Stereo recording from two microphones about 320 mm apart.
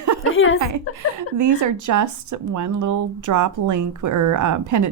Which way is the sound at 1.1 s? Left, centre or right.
Right.